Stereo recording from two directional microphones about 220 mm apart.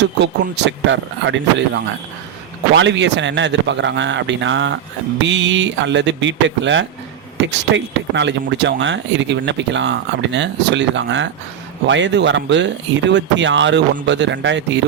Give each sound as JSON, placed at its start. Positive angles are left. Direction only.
{"t": 0.0, "sound": "speech", "side_deg": -50}